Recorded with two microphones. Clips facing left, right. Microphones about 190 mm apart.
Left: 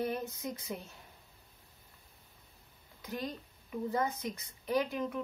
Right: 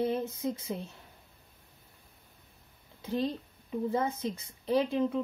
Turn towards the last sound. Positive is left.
turn(degrees=-30)  # may be behind; listen again after turning